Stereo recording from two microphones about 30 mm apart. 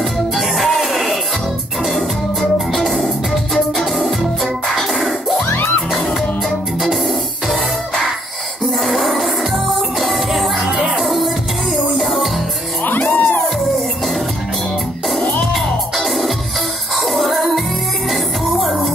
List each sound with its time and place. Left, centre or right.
0.0 s music: centre
3.5 s music: centre
8.8 s music: centre
13.0 s music: left
15.5 s music: centre